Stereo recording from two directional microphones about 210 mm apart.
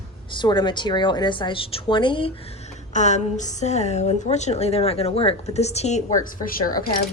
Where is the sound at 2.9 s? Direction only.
35° left (ahead or behind).